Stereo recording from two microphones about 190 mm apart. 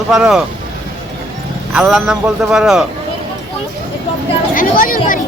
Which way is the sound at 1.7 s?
5° right (ahead or behind).